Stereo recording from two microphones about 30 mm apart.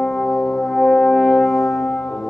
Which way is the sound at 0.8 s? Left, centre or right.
Centre.